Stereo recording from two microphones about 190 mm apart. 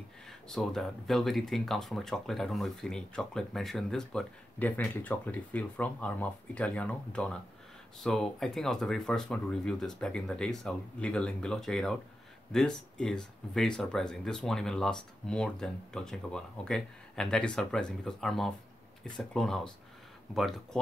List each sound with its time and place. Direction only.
0.5 s speech: centre (ahead or behind)